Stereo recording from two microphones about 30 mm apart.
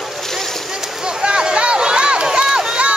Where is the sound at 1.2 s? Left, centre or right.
Right.